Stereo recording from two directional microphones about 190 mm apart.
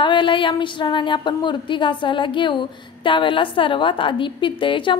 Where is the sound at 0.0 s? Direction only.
25° left (ahead or behind).